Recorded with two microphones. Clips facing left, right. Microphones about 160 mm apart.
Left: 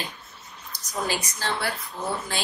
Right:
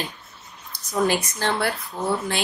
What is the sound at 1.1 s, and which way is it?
Speech, 55° right (ahead or behind).